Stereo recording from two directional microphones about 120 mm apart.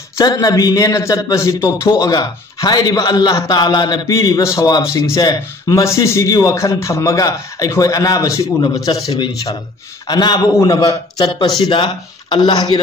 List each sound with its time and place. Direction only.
0.2 s a man's voice: 30° left (ahead or behind)